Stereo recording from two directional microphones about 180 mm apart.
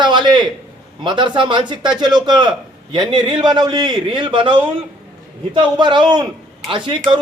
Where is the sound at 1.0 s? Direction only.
25° right (ahead or behind).